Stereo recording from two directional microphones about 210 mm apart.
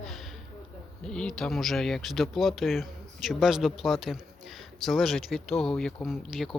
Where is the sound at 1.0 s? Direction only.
5° left (ahead or behind).